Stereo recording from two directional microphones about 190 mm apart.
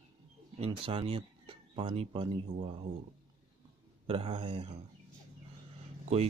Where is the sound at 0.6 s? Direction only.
30° right (ahead or behind).